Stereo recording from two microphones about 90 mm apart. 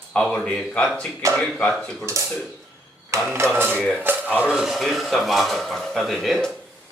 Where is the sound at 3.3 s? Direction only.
25° right (ahead or behind).